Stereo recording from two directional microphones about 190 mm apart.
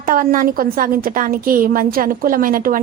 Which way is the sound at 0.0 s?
45° right (ahead or behind).